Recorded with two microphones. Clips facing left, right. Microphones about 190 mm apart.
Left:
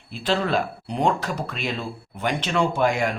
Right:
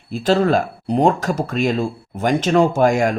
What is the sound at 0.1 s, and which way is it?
Speech, 45° right (ahead or behind).